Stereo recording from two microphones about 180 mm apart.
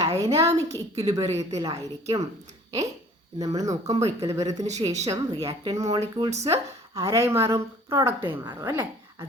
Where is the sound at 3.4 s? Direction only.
20° right (ahead or behind).